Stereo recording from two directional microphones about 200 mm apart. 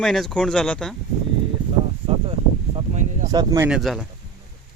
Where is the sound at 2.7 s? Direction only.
35° right (ahead or behind).